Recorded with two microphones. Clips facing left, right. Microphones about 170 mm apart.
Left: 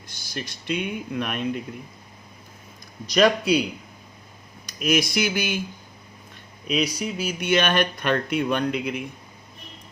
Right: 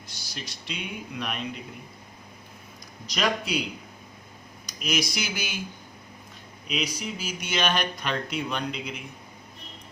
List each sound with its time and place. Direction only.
0.1 s speech: 50° left (ahead or behind)
3.2 s speech: 60° left (ahead or behind)
4.6 s speech: 55° left (ahead or behind)
6.7 s speech: 60° left (ahead or behind)